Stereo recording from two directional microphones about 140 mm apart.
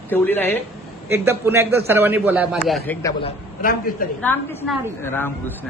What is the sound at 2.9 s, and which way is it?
Speech, 10° left (ahead or behind).